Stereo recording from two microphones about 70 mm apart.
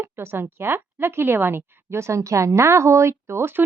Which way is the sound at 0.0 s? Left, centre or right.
Right.